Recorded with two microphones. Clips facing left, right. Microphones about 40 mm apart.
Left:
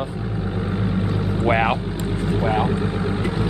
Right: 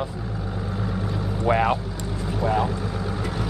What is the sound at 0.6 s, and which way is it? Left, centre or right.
Vehicle, left.